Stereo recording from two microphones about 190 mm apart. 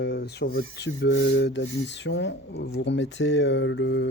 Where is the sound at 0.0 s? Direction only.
60° left (ahead or behind).